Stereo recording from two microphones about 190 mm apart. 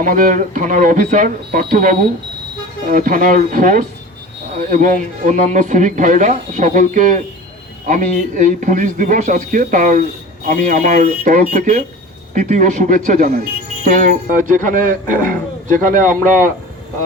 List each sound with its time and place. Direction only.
0.0 s speech: 45° right (ahead or behind)